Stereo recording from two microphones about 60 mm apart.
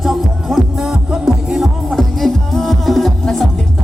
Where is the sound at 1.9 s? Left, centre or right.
Centre.